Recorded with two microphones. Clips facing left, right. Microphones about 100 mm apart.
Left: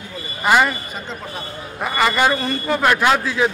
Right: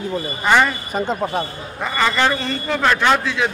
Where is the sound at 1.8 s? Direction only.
10° left (ahead or behind).